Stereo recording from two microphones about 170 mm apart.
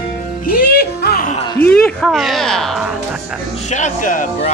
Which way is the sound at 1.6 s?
5° left (ahead or behind).